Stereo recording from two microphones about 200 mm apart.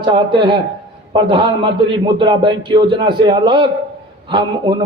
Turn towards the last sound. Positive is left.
turn(degrees=-25)  # may be behind; listen again after turning